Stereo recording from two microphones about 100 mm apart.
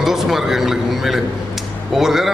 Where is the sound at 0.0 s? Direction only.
5° right (ahead or behind).